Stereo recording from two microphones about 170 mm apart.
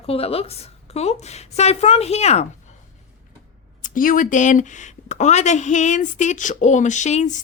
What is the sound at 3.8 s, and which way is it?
A woman's voice, 50° left (ahead or behind).